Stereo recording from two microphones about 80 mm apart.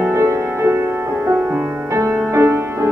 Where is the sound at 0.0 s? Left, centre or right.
Right.